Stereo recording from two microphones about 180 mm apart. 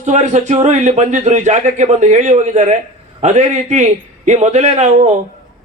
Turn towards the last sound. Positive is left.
turn(degrees=-40)  # may be behind; listen again after turning